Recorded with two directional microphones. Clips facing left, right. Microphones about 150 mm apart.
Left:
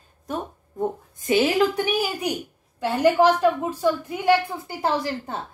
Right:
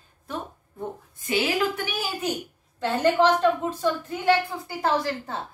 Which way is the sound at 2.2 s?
15° left (ahead or behind).